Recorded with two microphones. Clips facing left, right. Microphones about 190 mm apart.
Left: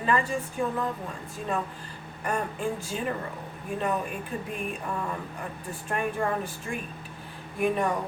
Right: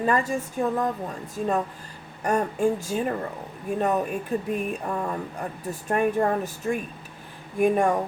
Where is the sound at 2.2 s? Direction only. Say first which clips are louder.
Right 7 dB; 45° right (ahead or behind).